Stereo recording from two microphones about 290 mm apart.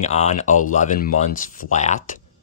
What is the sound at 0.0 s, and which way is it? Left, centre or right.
Speech, left.